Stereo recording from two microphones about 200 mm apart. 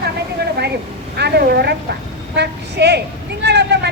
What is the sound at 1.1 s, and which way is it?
A woman's voice, 55° right (ahead or behind).